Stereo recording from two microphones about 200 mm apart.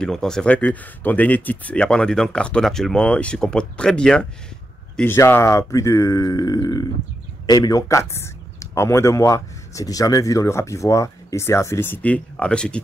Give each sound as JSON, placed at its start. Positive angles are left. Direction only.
{"t": 0.0, "sound": "speech", "side_deg": 5}